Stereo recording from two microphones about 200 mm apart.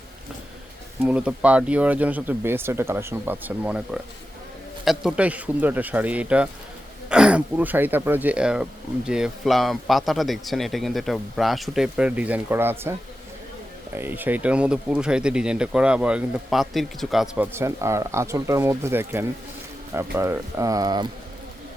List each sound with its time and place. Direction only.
1.0 s a man's voice: 5° right (ahead or behind)
13.9 s speech: 10° right (ahead or behind)